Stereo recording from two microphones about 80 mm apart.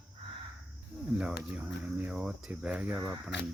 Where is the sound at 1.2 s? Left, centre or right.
Centre.